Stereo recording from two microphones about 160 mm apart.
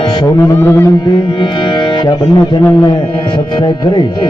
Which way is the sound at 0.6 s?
15° left (ahead or behind).